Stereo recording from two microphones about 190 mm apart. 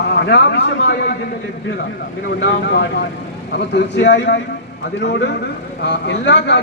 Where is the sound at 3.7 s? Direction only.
65° left (ahead or behind).